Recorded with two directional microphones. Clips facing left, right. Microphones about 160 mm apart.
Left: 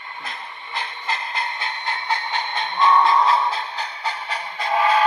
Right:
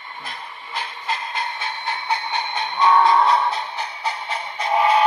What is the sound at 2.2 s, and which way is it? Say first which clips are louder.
Train: right 1 dB; 20° right (ahead or behind).